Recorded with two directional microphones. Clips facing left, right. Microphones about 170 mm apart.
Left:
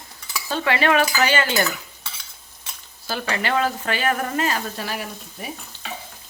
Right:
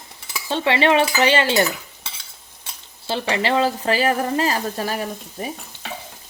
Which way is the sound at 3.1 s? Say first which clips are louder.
Right 3 dB; 25° right (ahead or behind).